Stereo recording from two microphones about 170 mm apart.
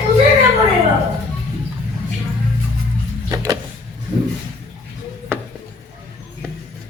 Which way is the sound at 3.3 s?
20° right (ahead or behind).